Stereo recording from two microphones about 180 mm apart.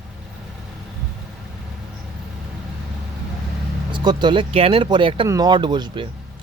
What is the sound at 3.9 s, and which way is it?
Speech, 25° right (ahead or behind).